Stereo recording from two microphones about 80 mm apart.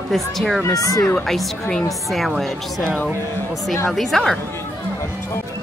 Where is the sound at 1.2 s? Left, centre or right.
Centre.